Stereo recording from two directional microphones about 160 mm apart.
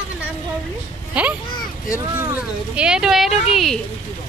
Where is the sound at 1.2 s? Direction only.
10° right (ahead or behind).